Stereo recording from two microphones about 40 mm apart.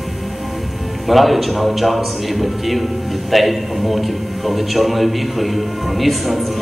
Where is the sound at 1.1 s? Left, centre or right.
Centre.